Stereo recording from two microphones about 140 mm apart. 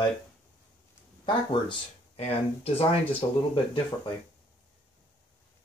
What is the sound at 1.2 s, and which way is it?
Speech, 35° left (ahead or behind).